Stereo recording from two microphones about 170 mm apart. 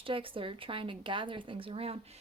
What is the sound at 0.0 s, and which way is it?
A woman's voice, 30° right (ahead or behind).